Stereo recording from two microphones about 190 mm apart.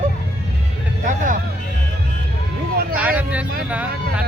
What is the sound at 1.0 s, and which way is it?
Vehicle, 40° right (ahead or behind).